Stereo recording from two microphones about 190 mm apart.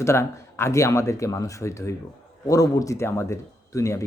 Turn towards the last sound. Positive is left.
turn(degrees=15)  # may be behind; listen again after turning